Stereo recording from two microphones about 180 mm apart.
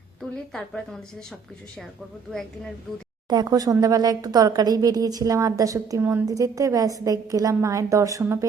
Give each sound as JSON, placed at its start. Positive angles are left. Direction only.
{"t": 3.2, "sound": "a woman's voice", "side_deg": -20}